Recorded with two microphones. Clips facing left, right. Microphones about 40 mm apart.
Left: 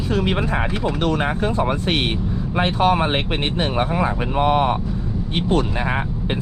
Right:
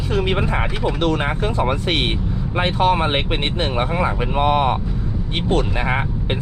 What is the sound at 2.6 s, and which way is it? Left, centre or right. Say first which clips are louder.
Speech: even; right.